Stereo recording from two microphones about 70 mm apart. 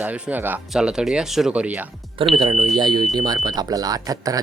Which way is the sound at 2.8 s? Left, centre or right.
Right.